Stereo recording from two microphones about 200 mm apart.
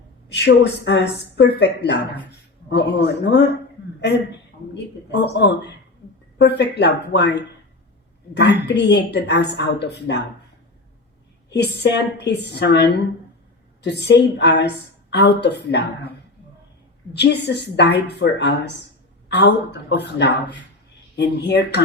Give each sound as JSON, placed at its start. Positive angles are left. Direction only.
{"t": 0.3, "sound": "a woman's voice", "side_deg": 60}
{"t": 4.7, "sound": "a woman's voice", "side_deg": 60}
{"t": 11.5, "sound": "a woman's voice", "side_deg": 55}
{"t": 13.9, "sound": "a woman's voice", "side_deg": 60}
{"t": 17.2, "sound": "a woman's voice", "side_deg": 55}